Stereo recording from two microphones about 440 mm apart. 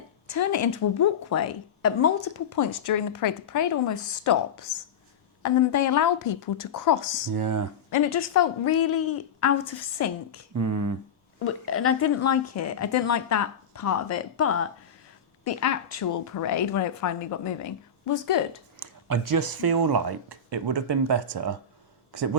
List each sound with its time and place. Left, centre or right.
0.3 s a woman's voice: left
7.3 s speech: right
7.9 s speech: left
10.0 s speech: left
10.5 s speech: right
11.4 s speech: left
18.8 s a man's voice: right